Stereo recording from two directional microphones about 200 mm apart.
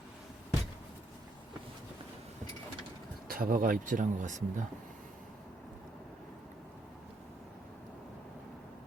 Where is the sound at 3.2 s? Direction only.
45° right (ahead or behind).